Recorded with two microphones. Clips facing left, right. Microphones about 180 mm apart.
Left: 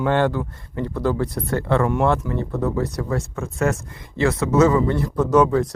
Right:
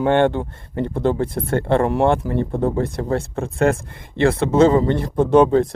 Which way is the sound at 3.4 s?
60° right (ahead or behind).